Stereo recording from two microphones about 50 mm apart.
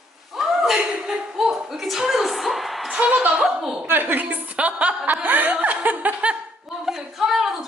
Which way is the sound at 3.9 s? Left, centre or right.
Right.